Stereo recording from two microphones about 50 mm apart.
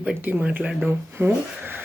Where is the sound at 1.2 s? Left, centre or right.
Right.